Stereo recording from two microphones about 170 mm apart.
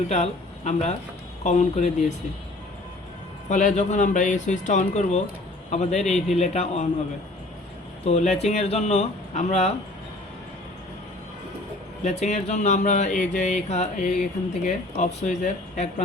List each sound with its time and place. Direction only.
0.1 s speech: 40° left (ahead or behind)
3.5 s speech: 45° left (ahead or behind)
8.0 s speech: 40° left (ahead or behind)
12.0 s speech: 40° left (ahead or behind)